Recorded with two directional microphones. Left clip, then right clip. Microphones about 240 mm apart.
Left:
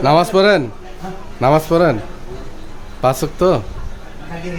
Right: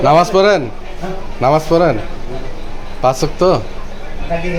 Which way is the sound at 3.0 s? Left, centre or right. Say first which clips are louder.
Right 2 dB; left.